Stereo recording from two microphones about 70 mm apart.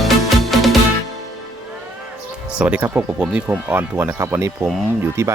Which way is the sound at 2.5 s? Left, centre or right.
Centre.